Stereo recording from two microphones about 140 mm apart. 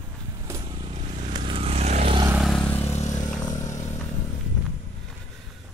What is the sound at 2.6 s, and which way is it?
Vehicle, 15° left (ahead or behind).